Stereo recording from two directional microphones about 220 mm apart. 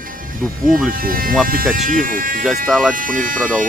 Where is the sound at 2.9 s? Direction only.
40° right (ahead or behind).